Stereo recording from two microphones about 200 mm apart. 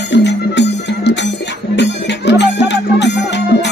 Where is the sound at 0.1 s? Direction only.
60° left (ahead or behind).